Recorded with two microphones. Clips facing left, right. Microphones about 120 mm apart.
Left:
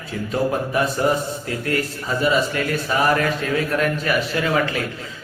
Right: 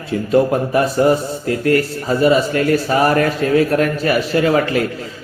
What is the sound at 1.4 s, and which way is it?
A man's voice, 35° right (ahead or behind).